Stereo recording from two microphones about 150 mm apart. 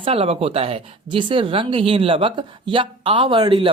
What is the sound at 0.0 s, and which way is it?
Speech, 40° right (ahead or behind).